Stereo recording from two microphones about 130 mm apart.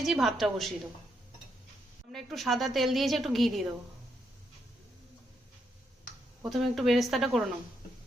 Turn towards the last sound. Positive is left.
turn(degrees=0)  # may be behind; listen again after turning